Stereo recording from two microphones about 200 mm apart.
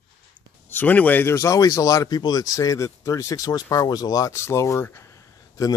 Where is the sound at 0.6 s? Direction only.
10° left (ahead or behind).